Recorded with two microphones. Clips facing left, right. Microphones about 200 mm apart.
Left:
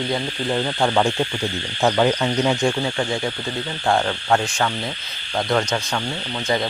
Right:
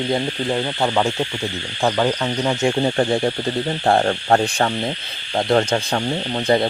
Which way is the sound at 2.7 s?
35° right (ahead or behind).